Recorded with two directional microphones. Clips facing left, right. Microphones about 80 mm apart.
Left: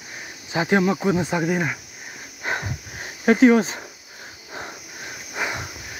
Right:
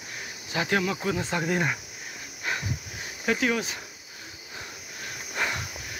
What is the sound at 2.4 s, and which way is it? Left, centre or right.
Dog, left.